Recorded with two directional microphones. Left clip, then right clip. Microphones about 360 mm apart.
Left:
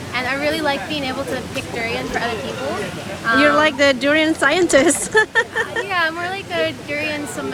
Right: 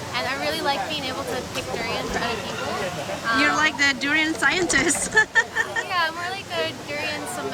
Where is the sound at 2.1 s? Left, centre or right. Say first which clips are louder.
Left 4 dB; centre.